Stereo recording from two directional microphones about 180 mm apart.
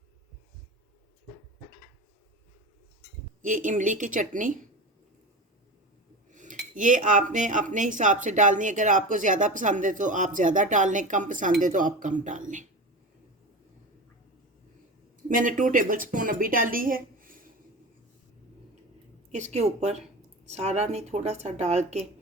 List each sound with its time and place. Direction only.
3.4 s speech: 45° right (ahead or behind)
6.3 s cutlery: 45° right (ahead or behind)
6.7 s speech: 45° right (ahead or behind)
15.3 s a woman's voice: 50° right (ahead or behind)
19.4 s speech: 40° right (ahead or behind)